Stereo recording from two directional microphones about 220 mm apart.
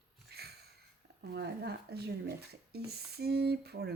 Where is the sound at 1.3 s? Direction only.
50° right (ahead or behind).